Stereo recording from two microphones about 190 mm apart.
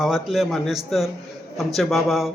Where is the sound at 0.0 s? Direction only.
Centre (ahead or behind).